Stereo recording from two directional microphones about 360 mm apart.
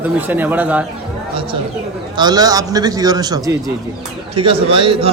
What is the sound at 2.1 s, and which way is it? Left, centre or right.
A man's voice, centre.